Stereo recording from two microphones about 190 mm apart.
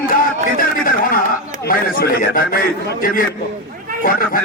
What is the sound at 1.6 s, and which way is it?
A man's voice, 50° left (ahead or behind).